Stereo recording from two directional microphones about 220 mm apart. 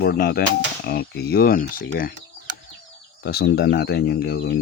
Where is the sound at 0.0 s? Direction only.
45° left (ahead or behind).